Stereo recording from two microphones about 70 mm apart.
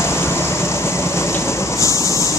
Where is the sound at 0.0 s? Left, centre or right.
Left.